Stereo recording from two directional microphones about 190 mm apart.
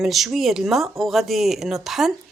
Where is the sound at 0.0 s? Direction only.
Centre (ahead or behind).